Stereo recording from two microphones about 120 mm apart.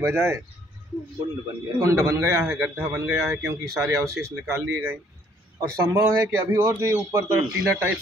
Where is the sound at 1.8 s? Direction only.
25° right (ahead or behind).